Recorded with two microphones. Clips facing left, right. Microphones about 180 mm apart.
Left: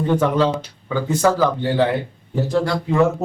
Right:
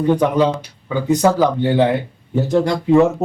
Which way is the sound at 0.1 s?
15° right (ahead or behind).